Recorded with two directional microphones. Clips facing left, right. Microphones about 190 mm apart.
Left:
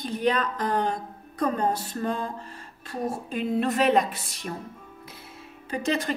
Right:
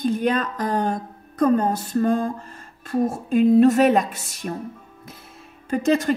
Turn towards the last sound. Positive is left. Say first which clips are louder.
# right 7 dB
turn(degrees=-45)  # may be behind; listen again after turning